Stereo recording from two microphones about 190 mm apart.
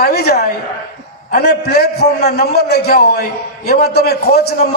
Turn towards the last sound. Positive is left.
turn(degrees=55)  # may be behind; listen again after turning